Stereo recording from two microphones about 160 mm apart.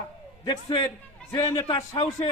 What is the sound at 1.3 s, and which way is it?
Speech, 25° left (ahead or behind).